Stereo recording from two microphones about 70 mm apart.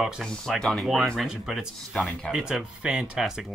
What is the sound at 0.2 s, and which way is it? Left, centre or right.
Speech, centre.